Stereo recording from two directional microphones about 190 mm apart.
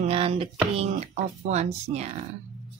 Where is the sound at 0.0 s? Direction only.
30° right (ahead or behind).